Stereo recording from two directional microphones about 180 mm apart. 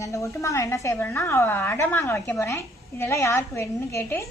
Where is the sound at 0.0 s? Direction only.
15° left (ahead or behind).